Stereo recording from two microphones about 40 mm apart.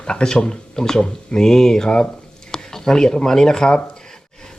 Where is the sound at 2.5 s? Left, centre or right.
Centre.